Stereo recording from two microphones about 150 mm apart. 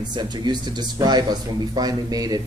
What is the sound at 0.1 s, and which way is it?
Speech, 30° right (ahead or behind).